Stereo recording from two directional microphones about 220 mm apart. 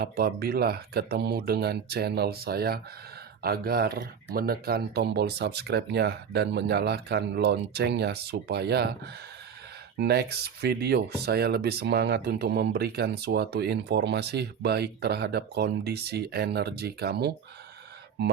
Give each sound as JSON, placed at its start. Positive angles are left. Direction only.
{"t": 0.0, "sound": "speech", "side_deg": -45}
{"t": 10.0, "sound": "speech", "side_deg": -50}